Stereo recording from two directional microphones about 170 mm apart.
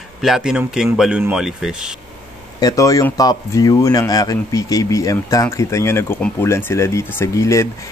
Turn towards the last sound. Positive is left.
turn(degrees=20)  # may be behind; listen again after turning